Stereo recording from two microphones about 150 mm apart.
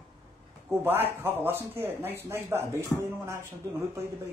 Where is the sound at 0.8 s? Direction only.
15° right (ahead or behind).